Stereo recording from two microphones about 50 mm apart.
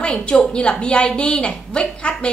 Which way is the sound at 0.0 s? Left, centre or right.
Centre.